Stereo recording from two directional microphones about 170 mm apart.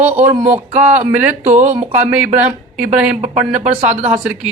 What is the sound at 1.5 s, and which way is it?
Speech, 45° right (ahead or behind).